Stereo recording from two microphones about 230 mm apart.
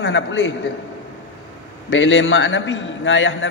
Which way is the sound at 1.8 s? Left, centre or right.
Left.